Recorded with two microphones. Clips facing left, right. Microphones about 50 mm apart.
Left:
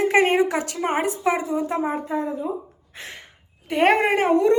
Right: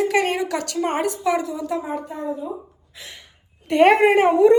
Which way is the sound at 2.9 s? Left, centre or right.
Left.